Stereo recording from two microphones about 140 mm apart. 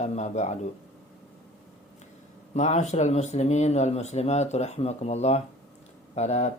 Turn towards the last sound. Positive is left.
turn(degrees=50)  # may be behind; listen again after turning